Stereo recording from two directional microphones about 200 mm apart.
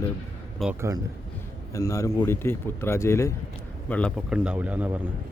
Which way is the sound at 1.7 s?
15° left (ahead or behind).